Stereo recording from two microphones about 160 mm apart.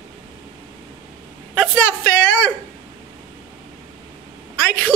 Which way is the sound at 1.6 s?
5° left (ahead or behind).